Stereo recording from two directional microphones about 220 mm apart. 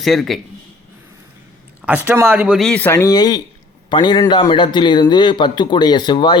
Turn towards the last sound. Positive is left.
turn(degrees=20)  # may be behind; listen again after turning